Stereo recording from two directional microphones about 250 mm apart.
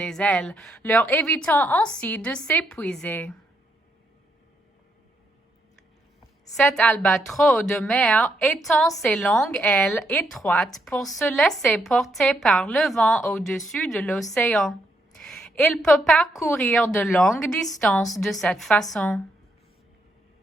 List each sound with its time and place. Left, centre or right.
0.0 s a woman's voice: centre
6.6 s a woman's voice: centre